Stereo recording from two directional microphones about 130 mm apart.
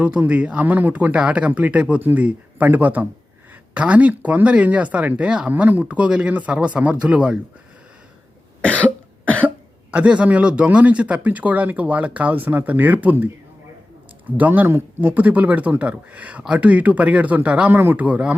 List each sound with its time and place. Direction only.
0.0 s speech: 10° right (ahead or behind)
8.6 s cough: 10° left (ahead or behind)
9.9 s speech: 10° right (ahead or behind)